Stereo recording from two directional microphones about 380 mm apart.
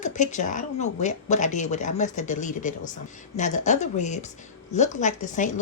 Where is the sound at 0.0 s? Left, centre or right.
Centre.